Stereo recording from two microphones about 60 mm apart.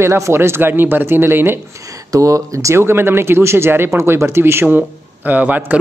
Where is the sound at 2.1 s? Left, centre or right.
Right.